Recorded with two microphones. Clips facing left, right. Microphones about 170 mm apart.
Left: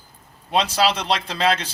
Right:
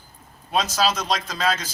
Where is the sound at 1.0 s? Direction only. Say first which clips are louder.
Left 2 dB; 30° left (ahead or behind).